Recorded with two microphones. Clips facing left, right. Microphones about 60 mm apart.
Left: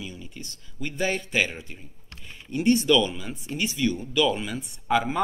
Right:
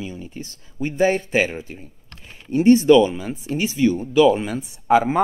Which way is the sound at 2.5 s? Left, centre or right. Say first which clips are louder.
Right 8 dB; right.